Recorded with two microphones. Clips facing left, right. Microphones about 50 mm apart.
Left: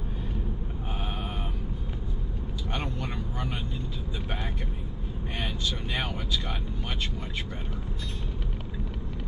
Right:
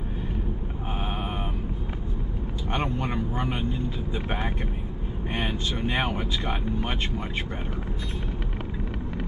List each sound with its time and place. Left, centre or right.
2.7 s vehicle: right
5.3 s speech: right